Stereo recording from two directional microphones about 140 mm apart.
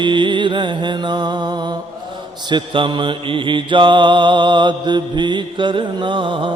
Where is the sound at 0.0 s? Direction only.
35° right (ahead or behind).